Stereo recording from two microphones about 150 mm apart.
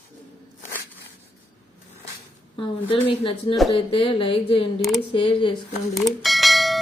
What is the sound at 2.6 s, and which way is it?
A woman's voice, 35° left (ahead or behind).